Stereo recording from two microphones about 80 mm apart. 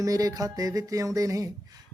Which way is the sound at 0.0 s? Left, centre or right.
Right.